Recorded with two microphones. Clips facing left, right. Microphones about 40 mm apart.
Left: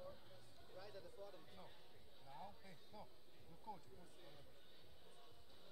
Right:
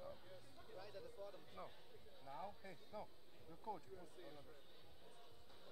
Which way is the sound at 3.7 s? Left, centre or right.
Right.